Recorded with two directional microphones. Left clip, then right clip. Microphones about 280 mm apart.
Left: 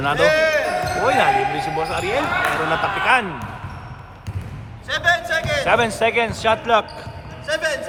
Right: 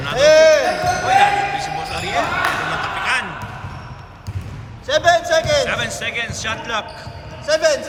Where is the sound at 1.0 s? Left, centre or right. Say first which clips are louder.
Right 2 dB; centre.